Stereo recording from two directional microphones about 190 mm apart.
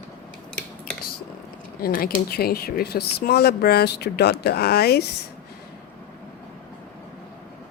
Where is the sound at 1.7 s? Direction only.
50° left (ahead or behind).